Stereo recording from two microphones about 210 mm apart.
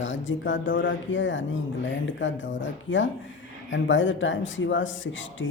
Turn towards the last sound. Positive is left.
turn(degrees=65)  # may be behind; listen again after turning